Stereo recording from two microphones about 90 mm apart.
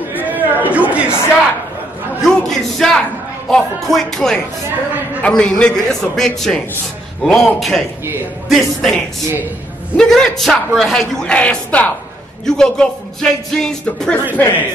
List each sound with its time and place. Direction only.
0.3 s a sound: 20° right (ahead or behind)
2.2 s speech: 5° left (ahead or behind)
3.4 s music: 5° left (ahead or behind)
5.2 s speech: 10° left (ahead or behind)
7.2 s music: 5° left (ahead or behind)
10.8 s speech: 5° left (ahead or behind)
14.3 s speech: 20° left (ahead or behind)